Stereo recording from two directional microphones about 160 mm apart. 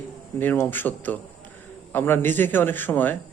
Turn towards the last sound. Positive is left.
turn(degrees=10)  # may be behind; listen again after turning